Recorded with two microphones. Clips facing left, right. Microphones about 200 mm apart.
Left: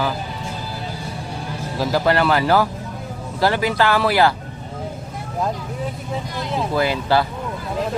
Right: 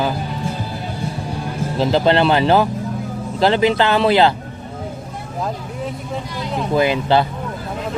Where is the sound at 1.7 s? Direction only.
20° right (ahead or behind).